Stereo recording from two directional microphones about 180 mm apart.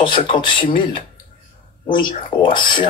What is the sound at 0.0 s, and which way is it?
Speech, 25° left (ahead or behind).